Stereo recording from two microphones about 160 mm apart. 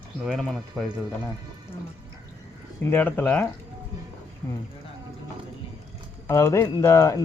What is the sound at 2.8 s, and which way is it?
Speech, 15° left (ahead or behind).